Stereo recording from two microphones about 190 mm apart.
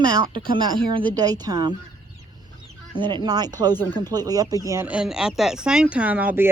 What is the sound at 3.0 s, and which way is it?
Speech, 25° right (ahead or behind).